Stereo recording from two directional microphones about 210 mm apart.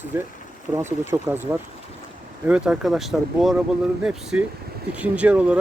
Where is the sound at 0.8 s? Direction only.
10° right (ahead or behind).